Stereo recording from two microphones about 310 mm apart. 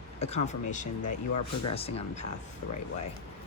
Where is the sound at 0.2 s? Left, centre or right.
Left.